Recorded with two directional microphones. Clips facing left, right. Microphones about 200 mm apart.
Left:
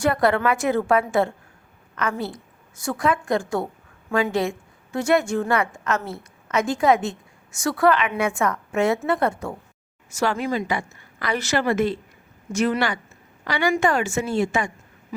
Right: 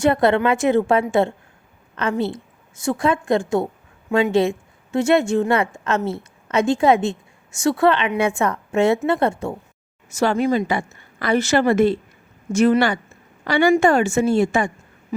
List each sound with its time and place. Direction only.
0.0 s a woman's voice: 25° right (ahead or behind)